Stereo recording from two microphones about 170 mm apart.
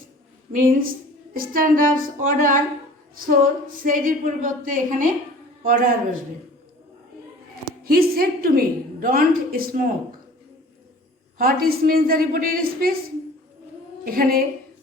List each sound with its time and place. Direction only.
0.5 s a woman's voice: 50° right (ahead or behind)
7.9 s a woman's voice: 60° right (ahead or behind)
11.3 s a woman's voice: 60° right (ahead or behind)
14.0 s a woman's voice: 60° right (ahead or behind)